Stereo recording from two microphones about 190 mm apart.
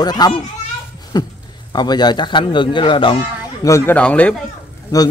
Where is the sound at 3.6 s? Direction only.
15° left (ahead or behind).